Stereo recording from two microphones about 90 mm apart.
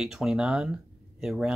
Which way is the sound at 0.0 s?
5° right (ahead or behind).